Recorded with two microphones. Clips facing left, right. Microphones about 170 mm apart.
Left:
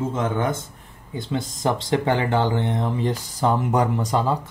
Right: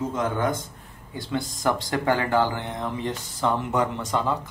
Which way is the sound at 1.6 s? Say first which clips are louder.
Left 4 dB; 25° left (ahead or behind).